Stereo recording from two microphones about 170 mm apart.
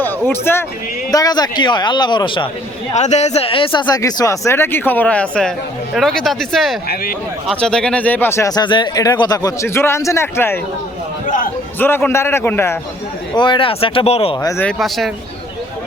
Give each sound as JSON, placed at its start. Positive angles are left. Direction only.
{"t": 0.3, "sound": "speech", "side_deg": 15}
{"t": 2.9, "sound": "speech", "side_deg": 45}
{"t": 6.8, "sound": "speech", "side_deg": 60}
{"t": 7.4, "sound": "speech", "side_deg": 5}
{"t": 11.8, "sound": "speech", "side_deg": 10}
{"t": 13.3, "sound": "speech", "side_deg": 25}
{"t": 14.4, "sound": "speech", "side_deg": 15}
{"t": 14.7, "sound": "speech", "side_deg": 0}